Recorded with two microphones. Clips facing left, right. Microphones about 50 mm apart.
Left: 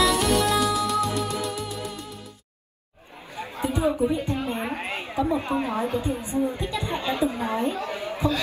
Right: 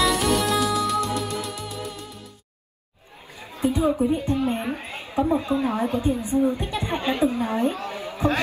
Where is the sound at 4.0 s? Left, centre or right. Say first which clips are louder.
Even; right.